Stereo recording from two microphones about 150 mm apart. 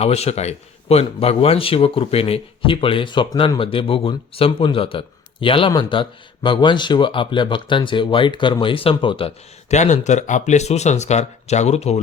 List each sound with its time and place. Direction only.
0.0 s speech: 45° left (ahead or behind)